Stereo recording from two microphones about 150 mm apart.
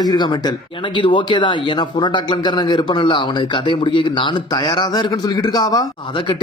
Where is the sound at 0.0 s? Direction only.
30° left (ahead or behind).